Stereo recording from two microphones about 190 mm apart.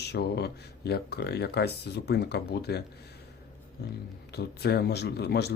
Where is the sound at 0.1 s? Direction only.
60° left (ahead or behind).